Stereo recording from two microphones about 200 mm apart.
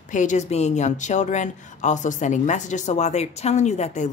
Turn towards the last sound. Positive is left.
turn(degrees=35)  # may be behind; listen again after turning